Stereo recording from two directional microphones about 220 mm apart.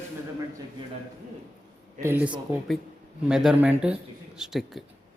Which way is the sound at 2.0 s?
10° right (ahead or behind).